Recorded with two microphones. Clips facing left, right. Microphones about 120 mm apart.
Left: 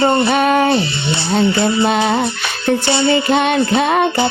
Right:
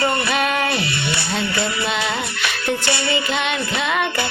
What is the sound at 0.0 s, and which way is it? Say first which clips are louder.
Music: left 7 dB; 25° left (ahead or behind).